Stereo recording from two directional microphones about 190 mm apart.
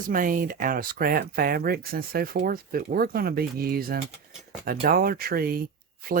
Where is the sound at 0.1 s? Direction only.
45° right (ahead or behind).